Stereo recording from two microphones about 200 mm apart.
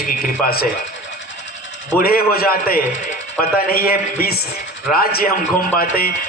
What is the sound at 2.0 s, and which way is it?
A man's voice, 50° left (ahead or behind).